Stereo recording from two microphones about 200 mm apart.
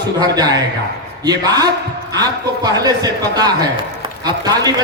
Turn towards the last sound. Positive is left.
turn(degrees=-20)  # may be behind; listen again after turning